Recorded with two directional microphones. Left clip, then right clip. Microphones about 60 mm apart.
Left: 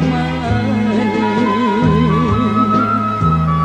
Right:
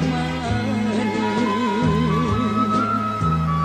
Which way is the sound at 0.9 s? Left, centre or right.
Right.